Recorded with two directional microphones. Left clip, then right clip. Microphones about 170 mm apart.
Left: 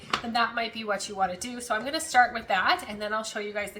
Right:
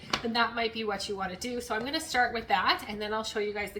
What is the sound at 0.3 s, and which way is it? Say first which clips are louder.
A woman's voice: left 1 dB; 15° left (ahead or behind).